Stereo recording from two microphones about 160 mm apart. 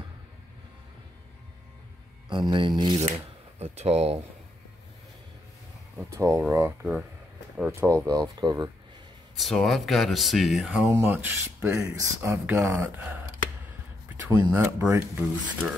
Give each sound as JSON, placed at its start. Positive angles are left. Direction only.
{"t": 2.2, "sound": "speech", "side_deg": -30}
{"t": 3.1, "sound": "speech", "side_deg": -40}
{"t": 6.1, "sound": "speech", "side_deg": -20}
{"t": 9.4, "sound": "speech", "side_deg": 0}
{"t": 14.2, "sound": "speech", "side_deg": -15}